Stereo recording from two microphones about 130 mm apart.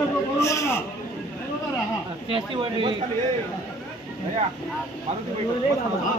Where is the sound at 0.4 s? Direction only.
20° left (ahead or behind).